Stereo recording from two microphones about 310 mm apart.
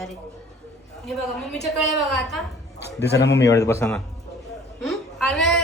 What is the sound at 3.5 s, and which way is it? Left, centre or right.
Speech, centre.